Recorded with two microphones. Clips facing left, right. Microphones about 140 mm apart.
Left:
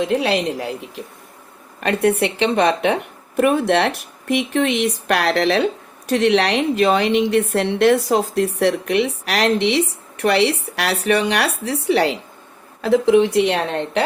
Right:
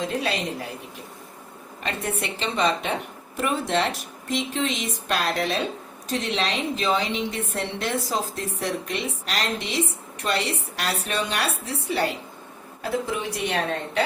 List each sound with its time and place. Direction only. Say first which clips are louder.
0.2 s speech: left 7 dB; 85° left
1.8 s a woman's voice: left 12 dB; 70° left (ahead or behind)
6.1 s a woman's voice: left 10 dB; 70° left (ahead or behind)